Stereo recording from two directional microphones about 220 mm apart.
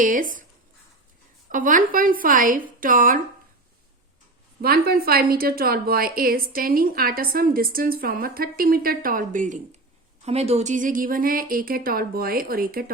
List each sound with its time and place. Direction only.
0.0 s a woman's voice: 35° right (ahead or behind)
1.5 s a woman's voice: 40° right (ahead or behind)
4.6 s a woman's voice: 45° right (ahead or behind)